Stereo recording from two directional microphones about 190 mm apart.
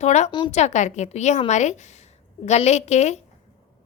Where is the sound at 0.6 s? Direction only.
40° left (ahead or behind).